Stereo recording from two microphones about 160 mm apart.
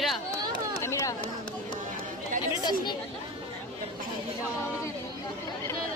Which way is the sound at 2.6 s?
25° left (ahead or behind).